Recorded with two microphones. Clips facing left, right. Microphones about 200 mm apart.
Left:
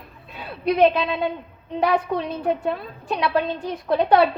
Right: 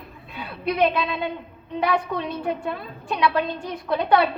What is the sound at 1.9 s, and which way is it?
A woman's voice, 35° left (ahead or behind).